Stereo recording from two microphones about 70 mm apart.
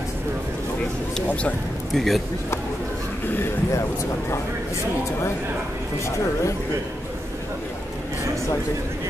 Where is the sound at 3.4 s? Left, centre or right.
Left.